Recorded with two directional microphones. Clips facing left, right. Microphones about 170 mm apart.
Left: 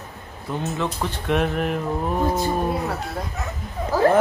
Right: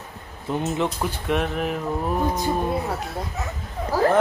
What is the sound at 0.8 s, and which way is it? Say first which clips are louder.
Speech: even; centre (ahead or behind).